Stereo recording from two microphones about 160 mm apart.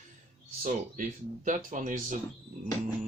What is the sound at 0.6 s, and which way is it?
Speech, 55° right (ahead or behind).